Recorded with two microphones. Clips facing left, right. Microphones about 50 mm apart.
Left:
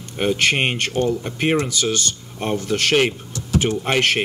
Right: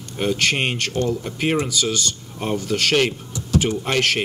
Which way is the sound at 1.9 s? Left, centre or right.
Centre.